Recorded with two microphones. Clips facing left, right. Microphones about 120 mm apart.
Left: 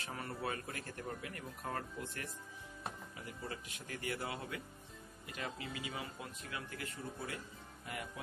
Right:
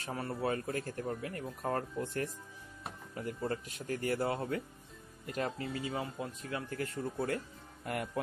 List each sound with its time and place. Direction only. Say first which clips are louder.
0.0 s speech: right 6 dB; 30° right (ahead or behind); by 8.1 s 55° right (ahead or behind)